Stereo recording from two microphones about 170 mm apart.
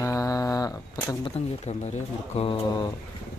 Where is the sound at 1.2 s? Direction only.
40° left (ahead or behind).